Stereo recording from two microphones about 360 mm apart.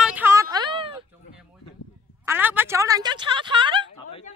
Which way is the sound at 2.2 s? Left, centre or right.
Centre.